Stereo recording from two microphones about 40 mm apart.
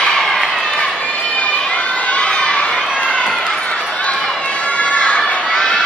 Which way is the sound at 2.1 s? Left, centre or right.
Left.